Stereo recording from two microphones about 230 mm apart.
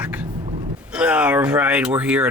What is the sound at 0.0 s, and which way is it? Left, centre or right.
Vehicle, centre.